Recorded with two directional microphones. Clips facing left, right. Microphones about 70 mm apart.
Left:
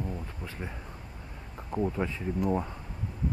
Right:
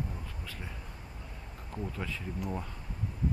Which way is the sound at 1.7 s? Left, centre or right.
Left.